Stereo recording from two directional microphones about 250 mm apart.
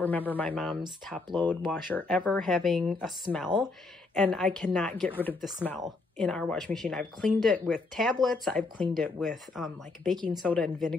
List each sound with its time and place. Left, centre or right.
0.0 s a woman's voice: centre
10.1 s speech: centre
10.4 s a woman's voice: centre